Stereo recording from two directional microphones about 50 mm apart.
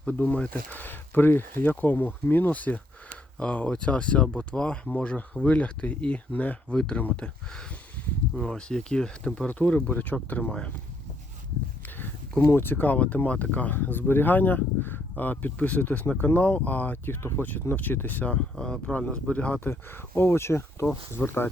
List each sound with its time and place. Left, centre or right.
0.0 s speech: left
0.8 s speech: left; by 9.5 s centre
9.5 s speech: left
12.5 s speech: left
18.3 s speech: centre
20.1 s speech: left